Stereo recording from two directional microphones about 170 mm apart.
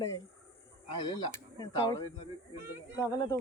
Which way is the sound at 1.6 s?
20° left (ahead or behind).